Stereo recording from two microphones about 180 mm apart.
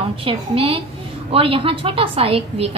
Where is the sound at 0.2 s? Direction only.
30° right (ahead or behind).